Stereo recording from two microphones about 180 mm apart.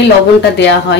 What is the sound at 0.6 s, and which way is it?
Speech, 75° left (ahead or behind).